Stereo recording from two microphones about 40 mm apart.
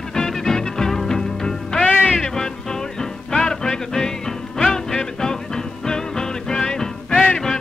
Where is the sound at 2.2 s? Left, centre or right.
Centre.